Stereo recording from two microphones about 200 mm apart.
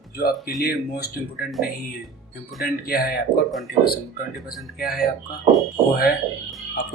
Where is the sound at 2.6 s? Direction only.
50° left (ahead or behind).